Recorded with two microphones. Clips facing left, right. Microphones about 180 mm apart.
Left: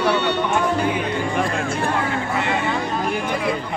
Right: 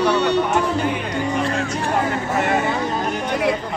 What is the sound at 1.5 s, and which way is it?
Speech, 40° right (ahead or behind).